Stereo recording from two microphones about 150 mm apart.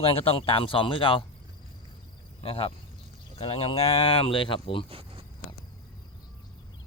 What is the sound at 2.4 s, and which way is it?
Speech, 40° left (ahead or behind).